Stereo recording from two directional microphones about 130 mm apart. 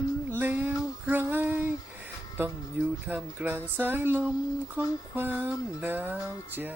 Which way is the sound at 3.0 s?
15° right (ahead or behind).